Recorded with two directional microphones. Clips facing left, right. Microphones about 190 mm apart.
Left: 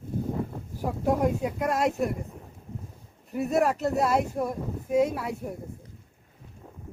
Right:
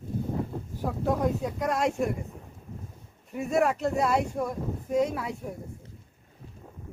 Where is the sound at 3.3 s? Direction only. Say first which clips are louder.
Left 1 dB; centre (ahead or behind).